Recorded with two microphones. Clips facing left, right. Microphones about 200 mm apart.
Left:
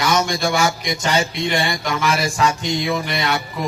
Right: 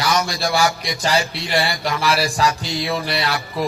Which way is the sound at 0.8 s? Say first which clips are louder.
Even; 35° right (ahead or behind).